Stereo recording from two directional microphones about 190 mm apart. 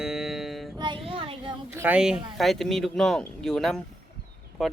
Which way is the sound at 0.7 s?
25° right (ahead or behind).